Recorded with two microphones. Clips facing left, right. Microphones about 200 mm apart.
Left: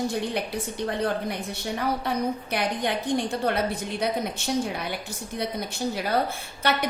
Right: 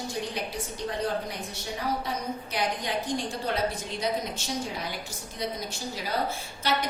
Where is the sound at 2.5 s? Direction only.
60° left (ahead or behind).